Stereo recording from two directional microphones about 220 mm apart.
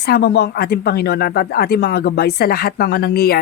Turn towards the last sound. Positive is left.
turn(degrees=45)  # may be behind; listen again after turning